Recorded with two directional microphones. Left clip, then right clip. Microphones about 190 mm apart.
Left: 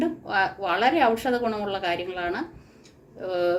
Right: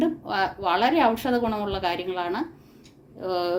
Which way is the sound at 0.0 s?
50° right (ahead or behind).